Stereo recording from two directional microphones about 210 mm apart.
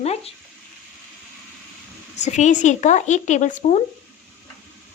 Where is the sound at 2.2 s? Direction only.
35° left (ahead or behind).